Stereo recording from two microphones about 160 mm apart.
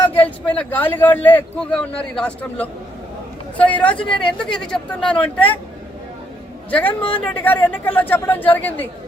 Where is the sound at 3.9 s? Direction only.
30° left (ahead or behind).